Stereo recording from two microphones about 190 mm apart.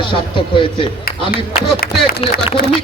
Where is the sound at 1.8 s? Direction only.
55° left (ahead or behind).